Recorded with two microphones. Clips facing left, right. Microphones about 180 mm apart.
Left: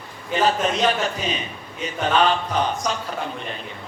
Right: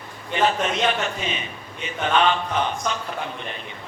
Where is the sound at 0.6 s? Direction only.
35° left (ahead or behind).